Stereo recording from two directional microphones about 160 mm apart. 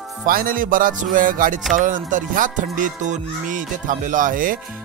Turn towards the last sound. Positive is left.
turn(degrees=-60)  # may be behind; listen again after turning